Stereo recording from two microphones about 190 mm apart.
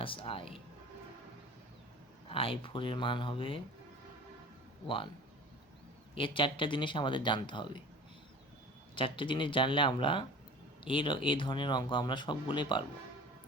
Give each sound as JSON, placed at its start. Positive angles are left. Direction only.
{"t": 0.0, "sound": "speech", "side_deg": 30}
{"t": 2.3, "sound": "speech", "side_deg": 30}
{"t": 6.1, "sound": "speech", "side_deg": 25}
{"t": 9.0, "sound": "speech", "side_deg": 25}